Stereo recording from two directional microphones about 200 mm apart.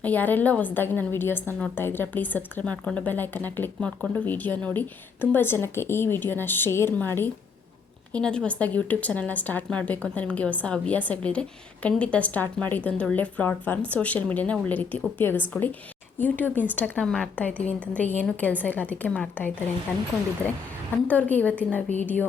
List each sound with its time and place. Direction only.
0.0 s a woman's voice: 10° left (ahead or behind)
21.1 s a woman's voice: 10° left (ahead or behind)